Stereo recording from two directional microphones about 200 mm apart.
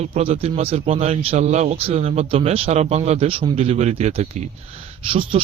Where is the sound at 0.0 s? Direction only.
30° right (ahead or behind).